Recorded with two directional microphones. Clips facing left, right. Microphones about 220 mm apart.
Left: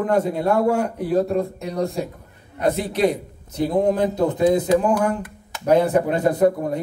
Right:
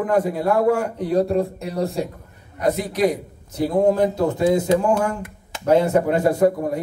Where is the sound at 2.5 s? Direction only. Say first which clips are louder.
Even; 30° left (ahead or behind).